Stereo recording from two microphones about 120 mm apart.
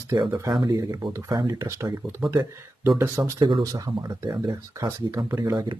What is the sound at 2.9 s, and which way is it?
Speech, 20° right (ahead or behind).